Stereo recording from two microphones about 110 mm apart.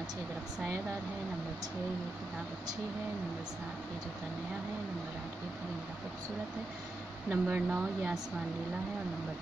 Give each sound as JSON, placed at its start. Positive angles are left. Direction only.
{"t": 7.2, "sound": "speech", "side_deg": -15}